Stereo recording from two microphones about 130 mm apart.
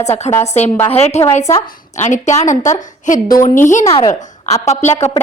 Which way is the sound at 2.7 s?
80° left.